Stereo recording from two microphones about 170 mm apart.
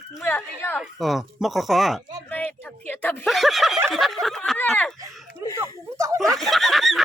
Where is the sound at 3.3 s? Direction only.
Centre (ahead or behind).